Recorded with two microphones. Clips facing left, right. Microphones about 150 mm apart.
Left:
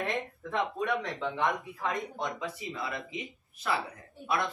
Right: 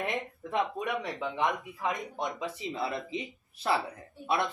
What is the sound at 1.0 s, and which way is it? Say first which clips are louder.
Speech: even; 15° right (ahead or behind).